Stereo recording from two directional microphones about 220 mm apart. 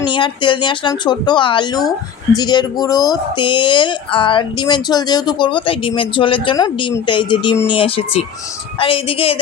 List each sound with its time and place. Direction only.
0.0 s speech: 20° left (ahead or behind)